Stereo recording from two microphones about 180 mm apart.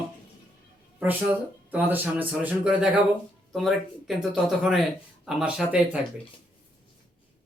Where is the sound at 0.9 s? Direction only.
10° right (ahead or behind).